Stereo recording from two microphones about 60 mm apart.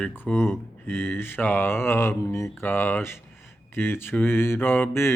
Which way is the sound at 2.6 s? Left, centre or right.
Left.